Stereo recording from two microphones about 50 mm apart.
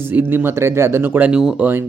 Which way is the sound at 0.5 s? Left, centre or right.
Right.